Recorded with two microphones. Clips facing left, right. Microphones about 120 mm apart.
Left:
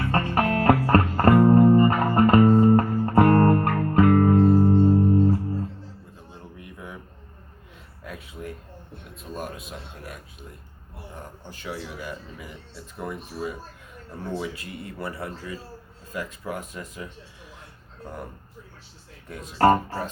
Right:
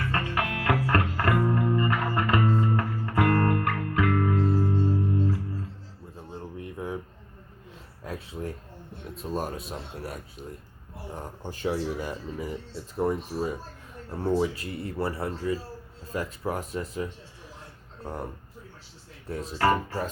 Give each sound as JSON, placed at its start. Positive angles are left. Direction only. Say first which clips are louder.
{"t": 0.0, "sound": "music", "louder": "left 6 dB", "side_deg": 40}
{"t": 6.3, "sound": "a sound", "louder": "right 7 dB", "side_deg": -30}
{"t": 8.0, "sound": "a sound", "louder": "right 2 dB", "side_deg": -35}
{"t": 9.1, "sound": "speech", "louder": "right 3 dB", "side_deg": -35}
{"t": 11.4, "sound": "speech", "louder": "right 8 dB", "side_deg": -40}
{"t": 19.3, "sound": "speech", "louder": "right 5 dB", "side_deg": -35}
{"t": 19.5, "sound": "speech", "louder": "left 6 dB", "side_deg": 40}